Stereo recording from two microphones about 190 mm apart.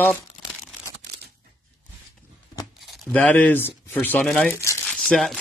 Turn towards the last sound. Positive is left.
turn(degrees=0)  # may be behind; listen again after turning